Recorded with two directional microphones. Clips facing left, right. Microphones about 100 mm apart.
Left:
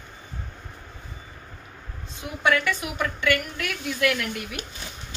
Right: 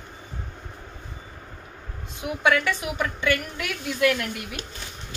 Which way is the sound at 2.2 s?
10° right (ahead or behind).